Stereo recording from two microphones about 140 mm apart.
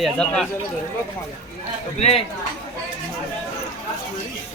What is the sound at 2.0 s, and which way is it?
Speech, 50° left (ahead or behind).